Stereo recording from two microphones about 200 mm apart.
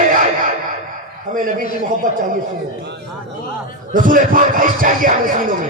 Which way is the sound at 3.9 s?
40° right (ahead or behind).